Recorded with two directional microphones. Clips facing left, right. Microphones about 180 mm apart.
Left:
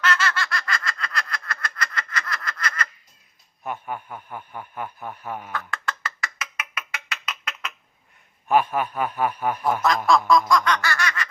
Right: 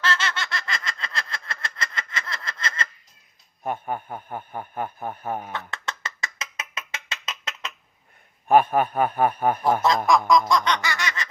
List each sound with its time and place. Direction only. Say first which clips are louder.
0.0 s a sound: left 2 dB; 25° right (ahead or behind)
3.7 s speech: right 3 dB; 45° right (ahead or behind)
5.5 s a sound: left 2 dB; 20° right (ahead or behind)
8.4 s a man's voice: right 3 dB; 50° right (ahead or behind)
10.1 s speech: left 1 dB; 15° right (ahead or behind)
10.5 s snicker: left 1 dB; 25° right (ahead or behind)